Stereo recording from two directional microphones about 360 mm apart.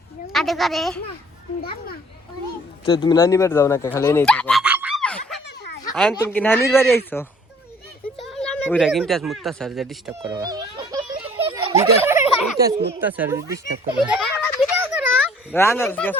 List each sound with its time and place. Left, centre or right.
0.3 s speech: centre
2.8 s speech: centre
8.2 s a sound: centre
12.0 s turkey: centre
12.5 s speech: right
13.0 s speech: centre
14.0 s children playing: centre
15.5 s speech: centre